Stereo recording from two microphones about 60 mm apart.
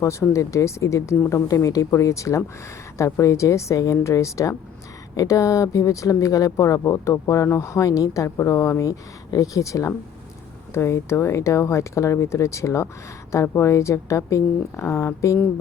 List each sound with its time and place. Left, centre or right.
0.0 s a woman's voice: left
1.6 s a woman's voice: left
5.1 s a woman's voice: left
8.4 s speech: left
8.8 s a woman's voice: left
10.8 s a woman's voice: left